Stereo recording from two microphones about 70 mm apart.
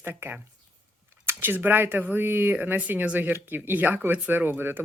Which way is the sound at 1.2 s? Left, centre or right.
Right.